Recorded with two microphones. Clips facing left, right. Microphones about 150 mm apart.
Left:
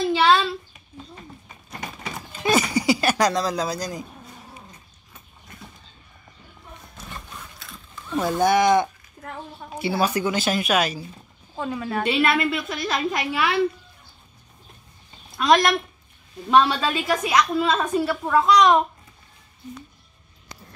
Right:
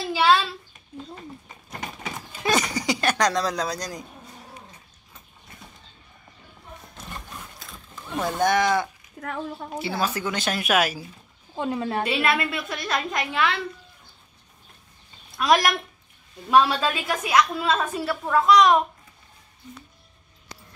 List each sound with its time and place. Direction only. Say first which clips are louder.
0.1 s a sound: even; 5° right (ahead or behind)
2.4 s a sound: left 4 dB; 5° left (ahead or behind)
8.2 s speech: left 3 dB; 5° left (ahead or behind)
9.2 s a woman's voice: right 5 dB; 70° right (ahead or behind)
9.8 s a woman's voice: left 5 dB; 15° left (ahead or behind); by 11.1 s 5° right (ahead or behind)
11.5 s a woman's voice: right 1 dB; 25° right (ahead or behind)
12.0 s a woman's voice: left 5 dB; centre (ahead or behind)
15.3 s a woman's voice: left 2 dB; 5° right (ahead or behind)